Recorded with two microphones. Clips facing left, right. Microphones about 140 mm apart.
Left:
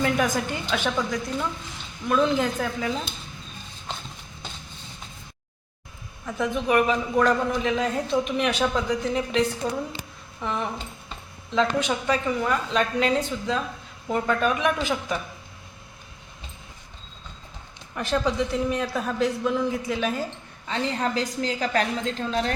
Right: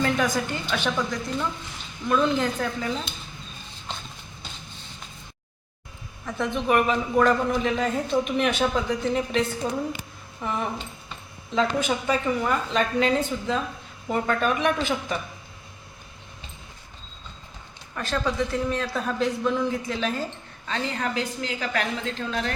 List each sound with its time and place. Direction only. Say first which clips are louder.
0.0 s a man's voice: even; 10° left (ahead or behind)
6.2 s a man's voice: even; 5° left (ahead or behind)
17.9 s a man's voice: left 2 dB; 20° left (ahead or behind)
20.7 s a woman's voice: left 2 dB; 20° left (ahead or behind)
21.0 s a woman's voice: left 2 dB; 35° left (ahead or behind)